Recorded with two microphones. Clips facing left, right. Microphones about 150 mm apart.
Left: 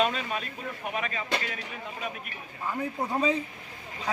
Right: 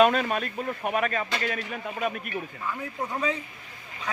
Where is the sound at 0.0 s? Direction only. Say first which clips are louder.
Right 7 dB; 55° right (ahead or behind).